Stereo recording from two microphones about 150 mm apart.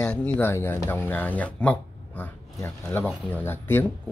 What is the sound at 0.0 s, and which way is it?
Speech, 5° left (ahead or behind).